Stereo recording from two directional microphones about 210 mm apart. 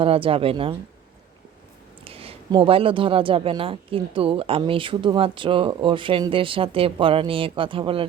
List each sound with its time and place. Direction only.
0.0 s speech: 25° right (ahead or behind)
2.0 s speech: 25° right (ahead or behind)